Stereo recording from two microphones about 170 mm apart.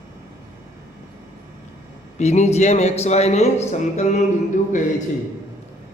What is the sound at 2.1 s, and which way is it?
Music, 40° left (ahead or behind).